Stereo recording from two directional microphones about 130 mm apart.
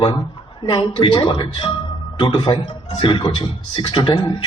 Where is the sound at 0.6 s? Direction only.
40° left (ahead or behind).